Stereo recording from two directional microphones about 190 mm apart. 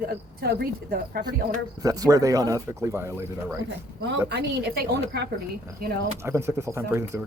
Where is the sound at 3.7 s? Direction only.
65° right (ahead or behind).